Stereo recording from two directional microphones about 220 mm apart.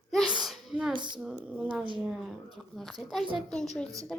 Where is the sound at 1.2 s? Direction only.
5° right (ahead or behind).